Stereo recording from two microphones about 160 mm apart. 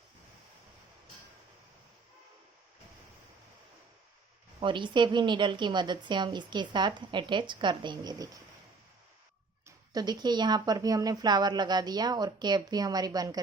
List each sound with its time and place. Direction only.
4.6 s a woman's voice: 30° right (ahead or behind)
9.6 s a woman's voice: 25° right (ahead or behind)